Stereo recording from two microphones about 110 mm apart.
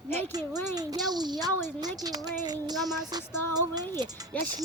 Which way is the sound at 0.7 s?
35° right (ahead or behind).